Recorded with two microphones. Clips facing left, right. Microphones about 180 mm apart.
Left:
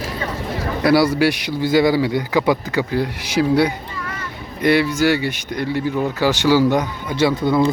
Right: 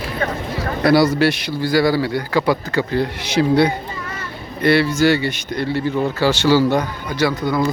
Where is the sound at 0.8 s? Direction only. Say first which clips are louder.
Right 1 dB; 10° left (ahead or behind).